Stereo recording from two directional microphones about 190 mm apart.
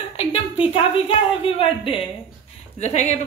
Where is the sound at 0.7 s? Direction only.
30° left (ahead or behind).